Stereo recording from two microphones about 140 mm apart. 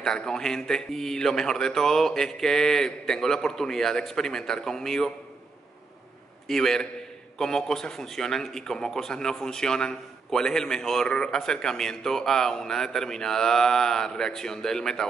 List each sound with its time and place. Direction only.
0.0 s a man's voice: 5° left (ahead or behind)
6.4 s a man's voice: 5° left (ahead or behind)